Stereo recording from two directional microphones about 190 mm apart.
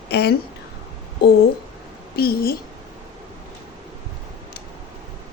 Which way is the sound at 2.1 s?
55° left (ahead or behind).